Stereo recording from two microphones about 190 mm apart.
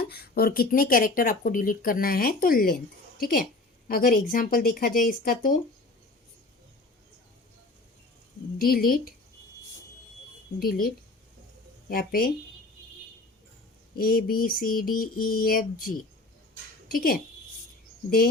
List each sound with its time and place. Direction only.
0.0 s speech: 55° left (ahead or behind)
8.5 s speech: 50° left (ahead or behind)
10.6 s speech: 50° left (ahead or behind)
13.9 s speech: 50° left (ahead or behind)
16.9 s speech: 50° left (ahead or behind)